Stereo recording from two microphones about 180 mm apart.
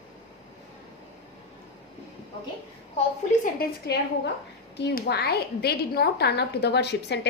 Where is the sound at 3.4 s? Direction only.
60° left (ahead or behind).